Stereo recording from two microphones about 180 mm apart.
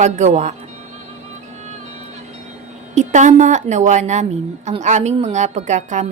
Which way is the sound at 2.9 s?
40° right (ahead or behind).